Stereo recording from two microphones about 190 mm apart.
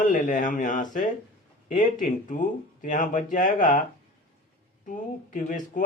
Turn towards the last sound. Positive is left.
turn(degrees=45)  # may be behind; listen again after turning